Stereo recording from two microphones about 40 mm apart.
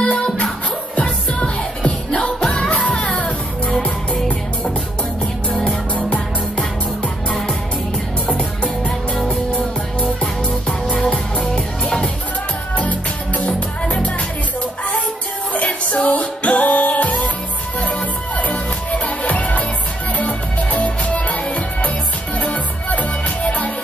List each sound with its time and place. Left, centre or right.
0.0 s music: left
7.2 s music: centre
11.1 s music: left
13.8 s music: left
15.5 s music: left
18.4 s music: left